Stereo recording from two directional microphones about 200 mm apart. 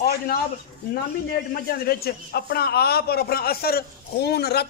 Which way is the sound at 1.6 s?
50° left (ahead or behind).